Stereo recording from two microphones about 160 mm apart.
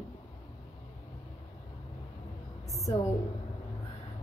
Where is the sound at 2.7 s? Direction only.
20° left (ahead or behind).